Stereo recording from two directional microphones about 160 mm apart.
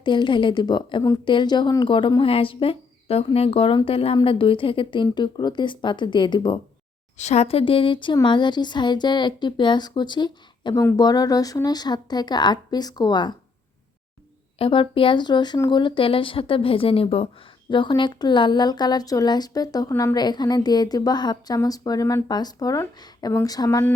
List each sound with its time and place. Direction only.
0.0 s speech: 30° left (ahead or behind)
7.2 s a woman's voice: 45° left (ahead or behind); by 13.3 s 25° left (ahead or behind)
14.6 s a woman's voice: 35° left (ahead or behind)